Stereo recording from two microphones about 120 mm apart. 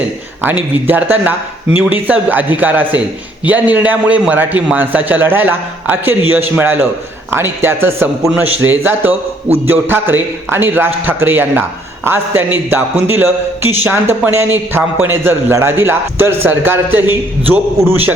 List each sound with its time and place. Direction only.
0.9 s a man's voice: 15° right (ahead or behind)